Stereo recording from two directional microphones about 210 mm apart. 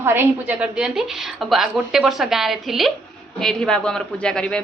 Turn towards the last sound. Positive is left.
turn(degrees=5)  # may be behind; listen again after turning